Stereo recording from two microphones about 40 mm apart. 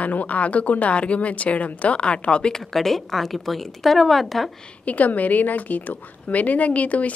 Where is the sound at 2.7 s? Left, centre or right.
Centre.